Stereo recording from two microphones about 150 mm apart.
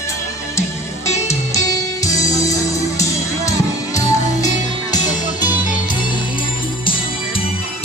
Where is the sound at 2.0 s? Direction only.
20° left (ahead or behind).